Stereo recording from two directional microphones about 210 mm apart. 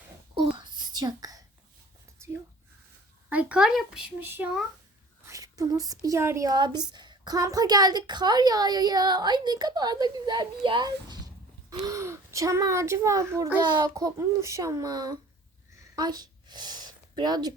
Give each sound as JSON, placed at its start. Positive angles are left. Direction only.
{"t": 0.3, "sound": "whispering", "side_deg": -20}
{"t": 3.2, "sound": "speech", "side_deg": -5}
{"t": 16.0, "sound": "a sound", "side_deg": -20}